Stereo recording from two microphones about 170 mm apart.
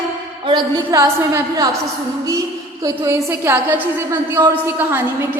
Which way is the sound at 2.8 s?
20° right (ahead or behind).